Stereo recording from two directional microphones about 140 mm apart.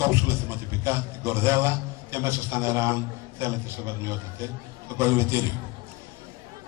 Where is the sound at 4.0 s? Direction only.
20° right (ahead or behind).